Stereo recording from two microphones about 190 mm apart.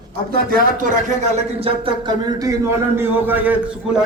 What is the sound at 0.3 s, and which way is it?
Speech, 45° right (ahead or behind).